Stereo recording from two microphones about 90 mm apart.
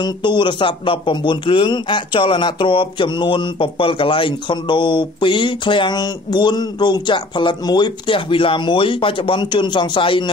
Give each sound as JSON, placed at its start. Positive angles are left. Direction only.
{"t": 0.0, "sound": "speech", "side_deg": 60}
{"t": 5.9, "sound": "speech", "side_deg": 50}